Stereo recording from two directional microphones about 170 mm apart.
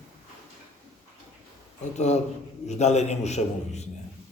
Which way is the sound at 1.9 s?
40° left (ahead or behind).